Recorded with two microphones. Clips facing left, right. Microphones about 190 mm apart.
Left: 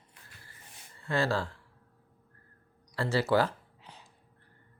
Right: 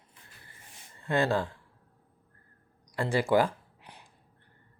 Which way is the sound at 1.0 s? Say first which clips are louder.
Right 3 dB; 20° right (ahead or behind).